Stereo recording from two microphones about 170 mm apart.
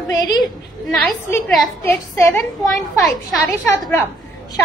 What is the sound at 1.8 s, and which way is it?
Speech, 15° left (ahead or behind).